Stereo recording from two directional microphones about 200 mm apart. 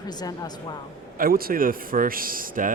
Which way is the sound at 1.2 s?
45° right (ahead or behind).